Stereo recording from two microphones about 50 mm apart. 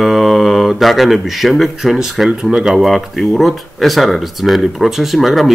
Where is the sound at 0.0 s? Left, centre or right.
Centre.